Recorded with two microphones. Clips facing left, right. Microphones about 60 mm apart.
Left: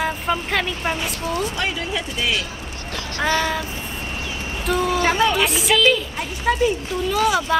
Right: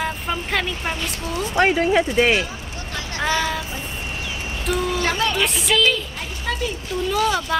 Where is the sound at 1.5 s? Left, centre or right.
Right.